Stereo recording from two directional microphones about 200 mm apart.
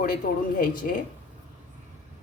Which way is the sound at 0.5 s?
45° left (ahead or behind).